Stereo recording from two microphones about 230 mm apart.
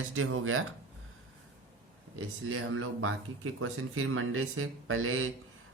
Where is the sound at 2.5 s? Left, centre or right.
Right.